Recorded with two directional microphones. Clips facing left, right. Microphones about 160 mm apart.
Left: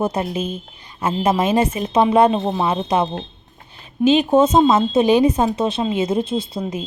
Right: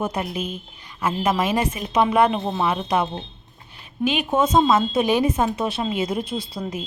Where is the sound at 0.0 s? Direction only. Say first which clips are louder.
Left 4 dB; 25° left (ahead or behind).